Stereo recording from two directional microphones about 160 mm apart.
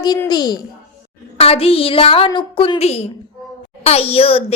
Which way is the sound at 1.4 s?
35° left (ahead or behind).